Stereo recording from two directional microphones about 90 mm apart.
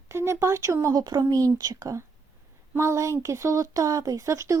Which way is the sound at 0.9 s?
50° right (ahead or behind).